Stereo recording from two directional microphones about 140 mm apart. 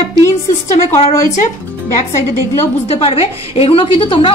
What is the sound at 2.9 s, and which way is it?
A woman's voice, 45° left (ahead or behind).